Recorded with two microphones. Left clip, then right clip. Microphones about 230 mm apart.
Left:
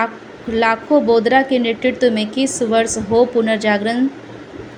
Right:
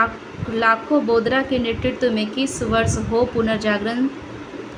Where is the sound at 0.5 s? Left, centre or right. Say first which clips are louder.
Left 3 dB; left.